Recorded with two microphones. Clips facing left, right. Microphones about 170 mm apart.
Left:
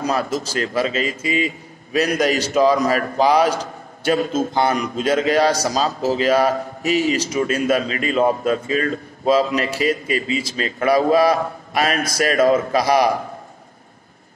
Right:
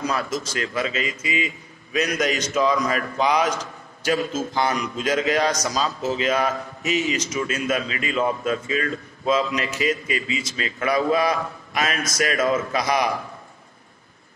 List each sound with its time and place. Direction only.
0.0 s a man's voice: 35° left (ahead or behind)